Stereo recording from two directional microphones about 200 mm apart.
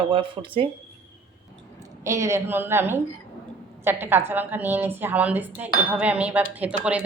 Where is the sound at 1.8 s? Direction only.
15° right (ahead or behind).